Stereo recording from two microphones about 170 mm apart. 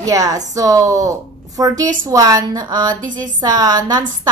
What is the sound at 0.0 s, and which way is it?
A woman's voice, 20° right (ahead or behind).